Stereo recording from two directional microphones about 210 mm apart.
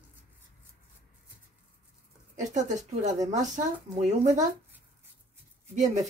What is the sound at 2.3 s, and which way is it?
Speech, 35° right (ahead or behind).